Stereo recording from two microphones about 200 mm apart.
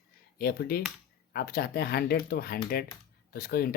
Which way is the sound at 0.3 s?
50° left (ahead or behind).